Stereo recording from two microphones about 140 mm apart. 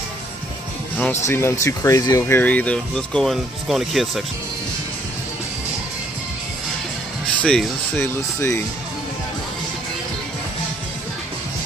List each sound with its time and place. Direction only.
1.2 s speech: 20° left (ahead or behind); by 4.2 s centre (ahead or behind)
7.4 s speech: 5° left (ahead or behind)
8.0 s speech: 15° left (ahead or behind)